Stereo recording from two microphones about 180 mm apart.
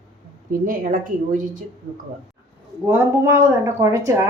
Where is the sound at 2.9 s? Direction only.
15° right (ahead or behind).